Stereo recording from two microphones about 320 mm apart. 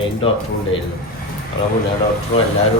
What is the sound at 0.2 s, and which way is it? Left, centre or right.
Speech, centre.